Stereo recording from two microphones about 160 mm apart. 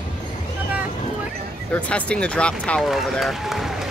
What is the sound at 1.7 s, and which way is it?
Speech, 5° left (ahead or behind).